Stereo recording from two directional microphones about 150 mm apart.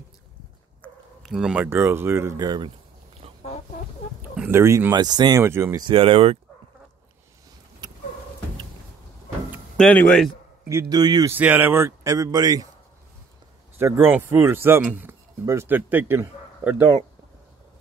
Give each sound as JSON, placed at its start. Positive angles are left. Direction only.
{"t": 1.2, "sound": "speech", "side_deg": -5}
{"t": 4.5, "sound": "speech", "side_deg": -15}
{"t": 5.4, "sound": "speech", "side_deg": -15}
{"t": 5.8, "sound": "speech", "side_deg": -35}
{"t": 9.8, "sound": "speech", "side_deg": 10}
{"t": 10.7, "sound": "speech", "side_deg": -20}
{"t": 11.3, "sound": "speech", "side_deg": -10}
{"t": 13.7, "sound": "speech", "side_deg": -15}